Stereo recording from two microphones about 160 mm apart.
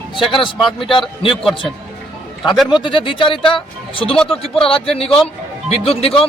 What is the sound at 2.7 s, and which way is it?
Speech, 30° left (ahead or behind).